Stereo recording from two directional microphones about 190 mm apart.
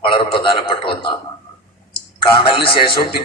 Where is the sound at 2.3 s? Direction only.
25° left (ahead or behind).